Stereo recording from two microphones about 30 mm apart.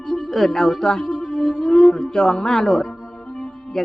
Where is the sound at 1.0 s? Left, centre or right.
Centre.